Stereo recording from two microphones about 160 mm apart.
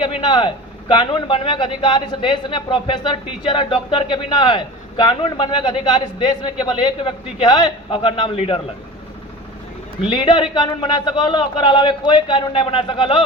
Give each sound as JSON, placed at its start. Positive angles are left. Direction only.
{"t": 0.0, "sound": "a man's voice", "side_deg": 30}
{"t": 10.1, "sound": "a man's voice", "side_deg": 30}